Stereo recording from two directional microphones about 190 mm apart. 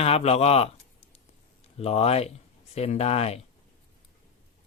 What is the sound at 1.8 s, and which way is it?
Speech, 30° left (ahead or behind).